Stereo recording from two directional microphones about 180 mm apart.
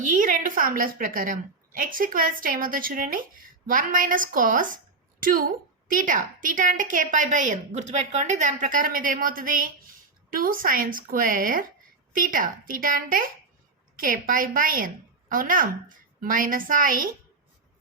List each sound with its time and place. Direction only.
0.0 s a woman's voice: 45° right (ahead or behind)